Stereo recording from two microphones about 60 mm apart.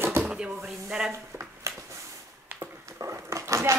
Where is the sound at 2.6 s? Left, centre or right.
Right.